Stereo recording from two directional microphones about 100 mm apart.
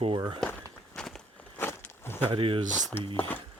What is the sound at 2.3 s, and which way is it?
Speech, 65° right (ahead or behind).